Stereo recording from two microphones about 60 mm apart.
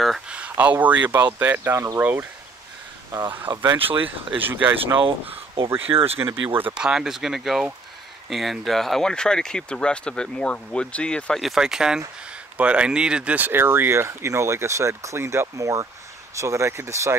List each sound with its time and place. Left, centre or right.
0.3 s speech: right
1.2 s speech: right
3.7 s speech: right
6.7 s speech: centre
11.4 s speech: centre
13.5 s speech: right
15.4 s speech: right